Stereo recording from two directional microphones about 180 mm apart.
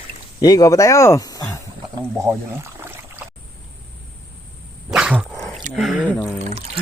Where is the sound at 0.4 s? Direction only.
20° left (ahead or behind).